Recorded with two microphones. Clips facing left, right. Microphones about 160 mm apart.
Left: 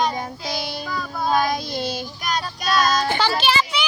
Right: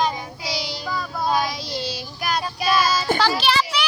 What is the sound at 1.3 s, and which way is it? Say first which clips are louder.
Child singing: left 3 dB; 50° left (ahead or behind).